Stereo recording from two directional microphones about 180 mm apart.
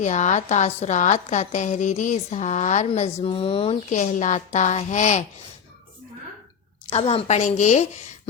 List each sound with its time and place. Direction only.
0.0 s a woman's voice: 40° left (ahead or behind)
3.8 s speech: 45° left (ahead or behind)
6.8 s a woman's voice: 30° left (ahead or behind)